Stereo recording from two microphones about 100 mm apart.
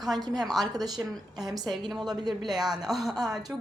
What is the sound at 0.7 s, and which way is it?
Speech, 40° right (ahead or behind).